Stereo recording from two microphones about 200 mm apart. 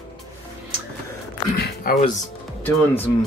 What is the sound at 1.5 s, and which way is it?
Speech, 50° left (ahead or behind).